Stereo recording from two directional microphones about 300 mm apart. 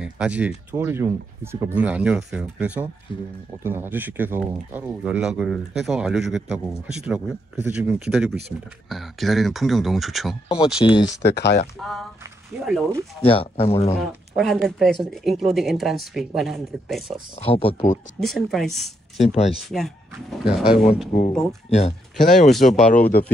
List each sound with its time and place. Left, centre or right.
0.0 s speech: centre
10.8 s speech: centre
11.1 s speech: left
11.8 s speech: centre
13.2 s speech: centre
14.0 s speech: centre
17.5 s speech: centre
18.2 s speech: centre
19.2 s speech: left
19.7 s speech: centre
21.6 s speech: left